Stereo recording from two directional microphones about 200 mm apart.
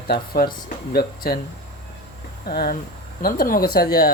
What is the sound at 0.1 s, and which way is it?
Speech, 45° left (ahead or behind).